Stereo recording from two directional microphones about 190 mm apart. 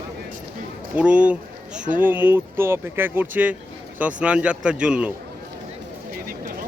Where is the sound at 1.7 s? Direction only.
40° right (ahead or behind).